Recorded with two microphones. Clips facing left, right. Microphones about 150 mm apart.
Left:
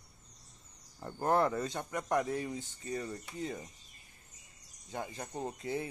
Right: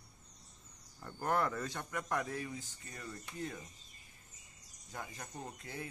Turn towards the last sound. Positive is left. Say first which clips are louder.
# left 8 dB
turn(degrees=25)  # may be behind; listen again after turning